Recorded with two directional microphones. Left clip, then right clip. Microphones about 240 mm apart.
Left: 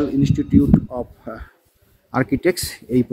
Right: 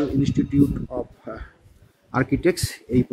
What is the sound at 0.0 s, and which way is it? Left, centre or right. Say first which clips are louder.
Speech: left 3 dB; left.